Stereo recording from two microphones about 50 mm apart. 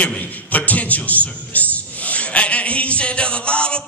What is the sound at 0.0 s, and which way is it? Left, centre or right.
A man's voice, left.